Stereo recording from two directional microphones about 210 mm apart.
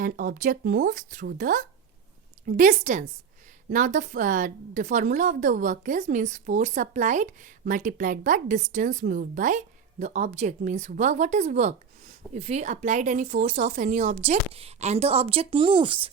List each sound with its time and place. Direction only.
0.0 s a woman's voice: 40° right (ahead or behind); by 16.0 s 25° right (ahead or behind)